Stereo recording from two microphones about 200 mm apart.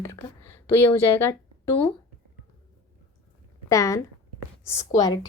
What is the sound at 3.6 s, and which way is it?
Speech, 15° left (ahead or behind).